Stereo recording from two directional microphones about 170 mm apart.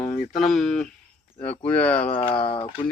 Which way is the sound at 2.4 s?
30° left (ahead or behind).